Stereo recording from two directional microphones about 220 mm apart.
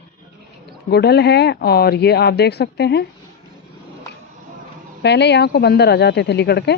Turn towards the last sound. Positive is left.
turn(degrees=50)  # may be behind; listen again after turning